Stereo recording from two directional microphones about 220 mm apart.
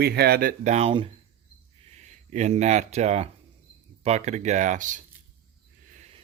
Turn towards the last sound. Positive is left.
turn(degrees=-30)  # may be behind; listen again after turning